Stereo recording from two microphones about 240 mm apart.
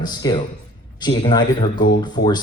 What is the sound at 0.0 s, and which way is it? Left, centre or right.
A man's voice, centre.